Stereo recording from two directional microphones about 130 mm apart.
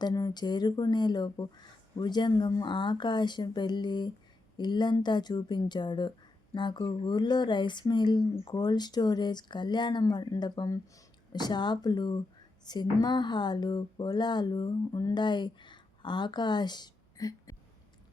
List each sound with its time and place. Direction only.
0.0 s speech: 30° left (ahead or behind)